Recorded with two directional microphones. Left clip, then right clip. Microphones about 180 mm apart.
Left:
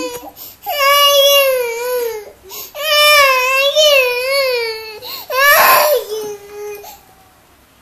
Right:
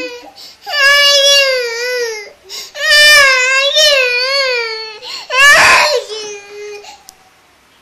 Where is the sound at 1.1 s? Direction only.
50° right (ahead or behind).